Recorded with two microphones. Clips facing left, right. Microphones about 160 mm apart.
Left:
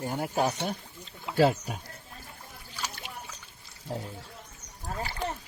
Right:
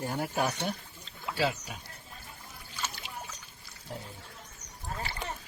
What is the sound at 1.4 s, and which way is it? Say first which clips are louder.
Speech: left 8 dB; 45° left (ahead or behind).